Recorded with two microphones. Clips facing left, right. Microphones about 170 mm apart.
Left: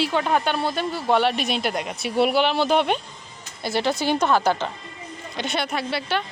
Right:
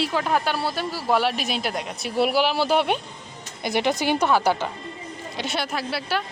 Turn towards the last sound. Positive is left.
turn(degrees=0)  # may be behind; listen again after turning